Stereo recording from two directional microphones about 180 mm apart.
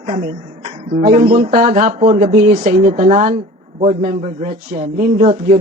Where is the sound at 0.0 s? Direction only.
40° right (ahead or behind); by 2.6 s 55° right (ahead or behind).